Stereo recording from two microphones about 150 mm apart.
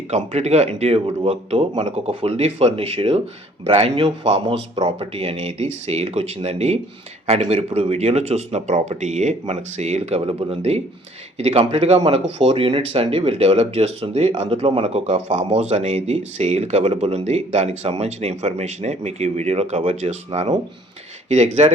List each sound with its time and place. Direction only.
0.1 s speech: 45° right (ahead or behind)